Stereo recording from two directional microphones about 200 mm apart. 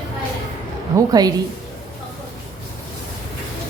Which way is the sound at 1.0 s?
20° right (ahead or behind).